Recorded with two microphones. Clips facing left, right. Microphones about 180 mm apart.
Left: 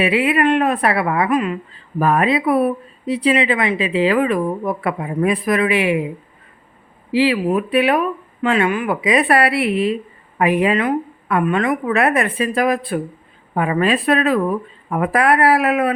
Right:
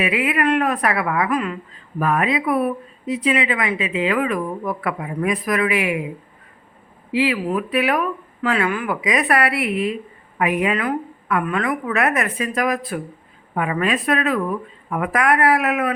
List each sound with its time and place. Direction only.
0.0 s speech: 30° left (ahead or behind)
2.0 s speech: 35° left (ahead or behind)
7.1 s speech: 30° left (ahead or behind)